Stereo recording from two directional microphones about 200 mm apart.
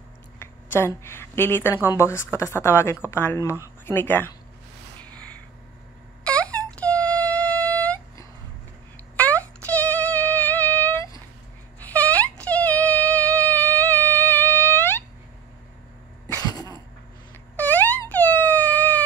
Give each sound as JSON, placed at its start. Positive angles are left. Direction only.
{"t": 0.4, "sound": "a woman's voice", "side_deg": 10}
{"t": 6.2, "sound": "a sound", "side_deg": 5}
{"t": 9.1, "sound": "music", "side_deg": 5}
{"t": 11.8, "sound": "a sound", "side_deg": 5}
{"t": 16.3, "sound": "cough", "side_deg": 20}
{"t": 17.6, "sound": "wail", "side_deg": 10}